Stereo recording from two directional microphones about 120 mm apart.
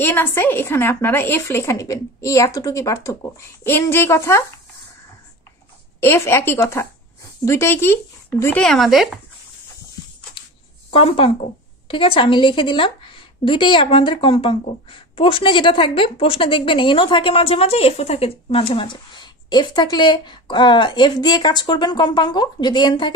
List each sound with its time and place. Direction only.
0.0 s speech: 20° left (ahead or behind)
5.9 s speech: 20° left (ahead or behind)
8.6 s speech: centre (ahead or behind)
10.9 s a woman's voice: 50° left (ahead or behind)